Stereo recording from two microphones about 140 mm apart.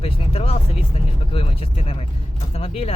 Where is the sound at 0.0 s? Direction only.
45° left (ahead or behind).